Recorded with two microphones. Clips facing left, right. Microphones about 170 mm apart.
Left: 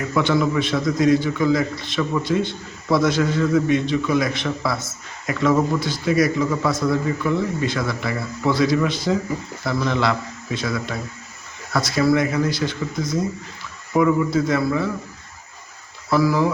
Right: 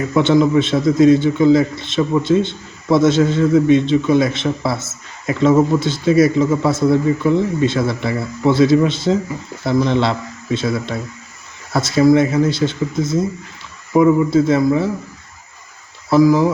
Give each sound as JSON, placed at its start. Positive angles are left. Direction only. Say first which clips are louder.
{"t": 0.1, "sound": "a man's voice", "louder": "right 7 dB", "side_deg": -20}
{"t": 16.0, "sound": "speech", "louder": "right 6 dB", "side_deg": -20}